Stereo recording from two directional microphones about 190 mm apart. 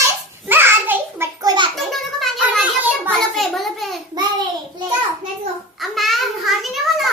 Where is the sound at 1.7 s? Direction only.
Centre (ahead or behind).